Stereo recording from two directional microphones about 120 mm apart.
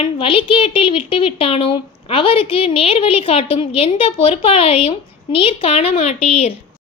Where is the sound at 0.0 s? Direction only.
50° left (ahead or behind).